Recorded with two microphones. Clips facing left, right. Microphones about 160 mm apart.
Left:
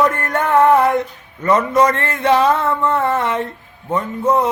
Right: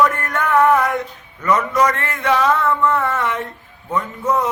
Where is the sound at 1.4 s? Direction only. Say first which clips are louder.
Left 3 dB; 30° left (ahead or behind).